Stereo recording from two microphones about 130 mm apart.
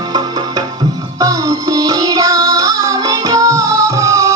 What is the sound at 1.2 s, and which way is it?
Music, 25° right (ahead or behind).